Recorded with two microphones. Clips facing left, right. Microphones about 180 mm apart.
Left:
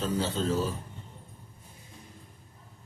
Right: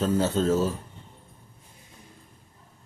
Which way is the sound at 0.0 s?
45° right (ahead or behind).